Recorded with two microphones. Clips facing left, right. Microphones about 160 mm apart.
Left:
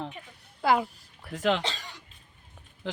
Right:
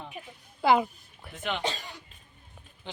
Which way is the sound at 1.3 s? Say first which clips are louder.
Left 8 dB; 90° left.